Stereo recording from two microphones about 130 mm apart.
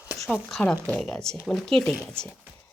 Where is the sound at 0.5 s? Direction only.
5° left (ahead or behind).